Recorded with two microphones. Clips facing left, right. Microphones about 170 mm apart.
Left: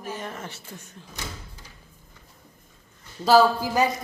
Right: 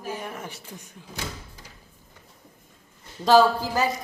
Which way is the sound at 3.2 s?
10° left (ahead or behind).